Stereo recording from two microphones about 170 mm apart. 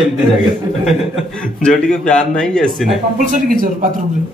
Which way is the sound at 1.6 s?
5° left (ahead or behind).